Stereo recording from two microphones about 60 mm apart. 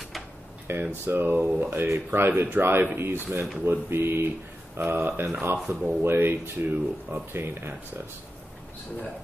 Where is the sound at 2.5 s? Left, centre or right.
Right.